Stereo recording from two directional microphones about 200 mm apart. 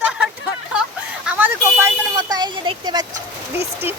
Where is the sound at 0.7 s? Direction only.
5° right (ahead or behind); by 3.2 s 20° right (ahead or behind).